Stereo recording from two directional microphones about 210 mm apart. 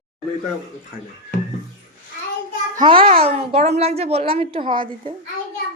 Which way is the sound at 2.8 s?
25° right (ahead or behind).